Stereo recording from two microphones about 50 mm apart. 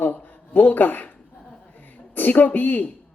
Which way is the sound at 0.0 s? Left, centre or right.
Left.